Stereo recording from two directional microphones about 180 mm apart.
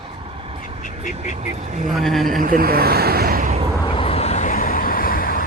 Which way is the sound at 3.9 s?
35° left (ahead or behind).